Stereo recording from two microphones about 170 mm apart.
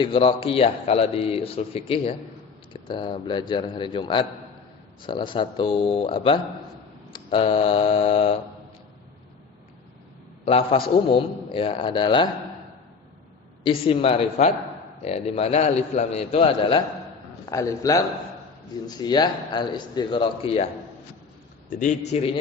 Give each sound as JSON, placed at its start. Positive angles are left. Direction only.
{"t": 0.0, "sound": "a man's voice", "side_deg": 30}
{"t": 10.4, "sound": "a man's voice", "side_deg": 35}
{"t": 13.7, "sound": "a man's voice", "side_deg": 30}
{"t": 17.4, "sound": "a man's voice", "side_deg": 20}
{"t": 21.7, "sound": "a man's voice", "side_deg": 45}